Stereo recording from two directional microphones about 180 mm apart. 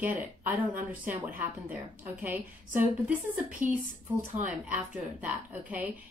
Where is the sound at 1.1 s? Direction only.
10° right (ahead or behind).